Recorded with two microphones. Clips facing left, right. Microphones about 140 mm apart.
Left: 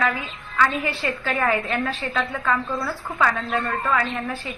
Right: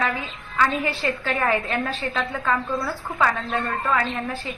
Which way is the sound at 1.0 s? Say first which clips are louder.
Left 2 dB; 25° right (ahead or behind).